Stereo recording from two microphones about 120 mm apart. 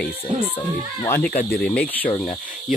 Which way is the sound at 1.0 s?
20° left (ahead or behind).